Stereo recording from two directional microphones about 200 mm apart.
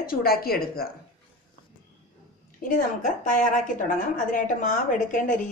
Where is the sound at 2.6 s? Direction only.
45° left (ahead or behind).